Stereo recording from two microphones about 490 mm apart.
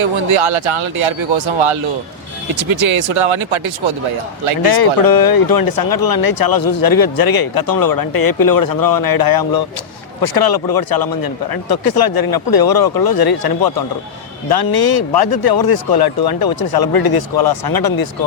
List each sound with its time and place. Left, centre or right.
0.0 s speech: right
4.7 s speech: left